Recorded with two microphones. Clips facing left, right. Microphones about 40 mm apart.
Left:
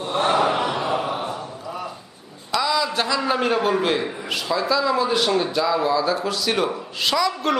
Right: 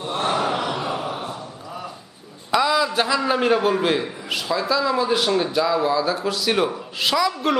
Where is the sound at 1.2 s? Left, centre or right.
Left.